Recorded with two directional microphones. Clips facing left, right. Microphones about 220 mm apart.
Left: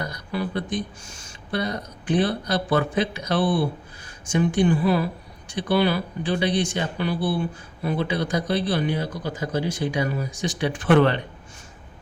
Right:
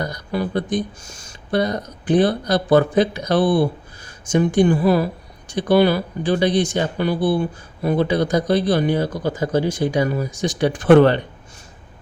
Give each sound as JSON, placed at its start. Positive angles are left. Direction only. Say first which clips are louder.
{"t": 0.0, "sound": "speech", "louder": "right 5 dB", "side_deg": -40}